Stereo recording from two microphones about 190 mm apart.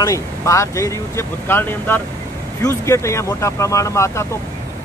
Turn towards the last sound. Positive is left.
turn(degrees=15)  # may be behind; listen again after turning